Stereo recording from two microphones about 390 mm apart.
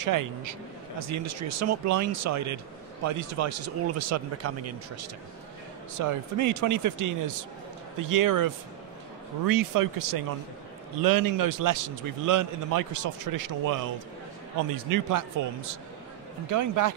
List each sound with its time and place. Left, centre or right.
0.0 s a man's voice: right
14.9 s a man's voice: right
16.4 s a man's voice: right